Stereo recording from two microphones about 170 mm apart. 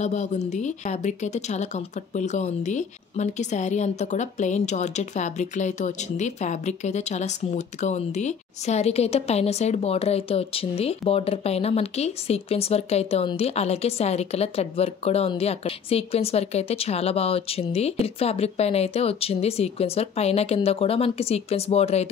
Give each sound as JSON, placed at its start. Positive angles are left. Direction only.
{"t": 0.0, "sound": "a woman's voice", "side_deg": 45}